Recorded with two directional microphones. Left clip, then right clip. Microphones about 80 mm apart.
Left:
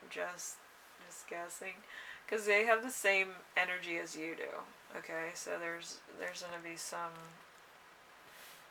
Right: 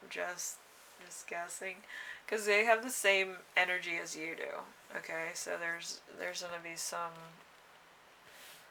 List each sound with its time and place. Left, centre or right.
0.1 s speech: right